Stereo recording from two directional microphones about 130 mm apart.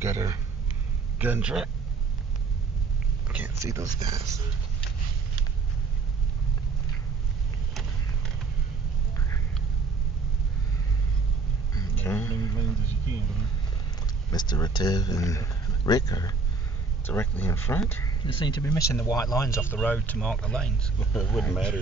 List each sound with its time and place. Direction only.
0.0 s speech: 25° right (ahead or behind)
1.1 s a man's voice: 10° right (ahead or behind)
3.3 s a sound: 10° right (ahead or behind)
3.5 s speech: 25° right (ahead or behind)
12.0 s a sound: 20° left (ahead or behind)
14.3 s speech: 35° left (ahead or behind)
17.0 s speech: 15° left (ahead or behind)
18.0 s speech: 35° left (ahead or behind)
18.6 s speech: 15° left (ahead or behind)
19.0 s speech: 25° left (ahead or behind)
19.7 s speech: 15° left (ahead or behind)